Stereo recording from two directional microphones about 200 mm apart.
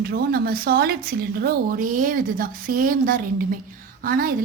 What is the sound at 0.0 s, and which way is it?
A woman's voice, 50° right (ahead or behind).